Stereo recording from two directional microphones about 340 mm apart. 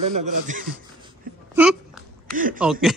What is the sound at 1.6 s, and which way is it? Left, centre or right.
Speech, centre.